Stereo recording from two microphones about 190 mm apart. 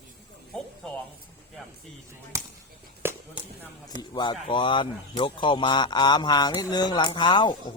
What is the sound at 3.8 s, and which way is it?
Speech, 25° left (ahead or behind).